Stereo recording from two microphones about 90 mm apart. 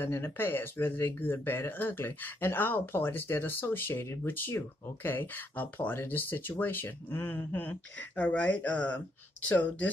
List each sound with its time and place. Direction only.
0.0 s speech: 25° left (ahead or behind)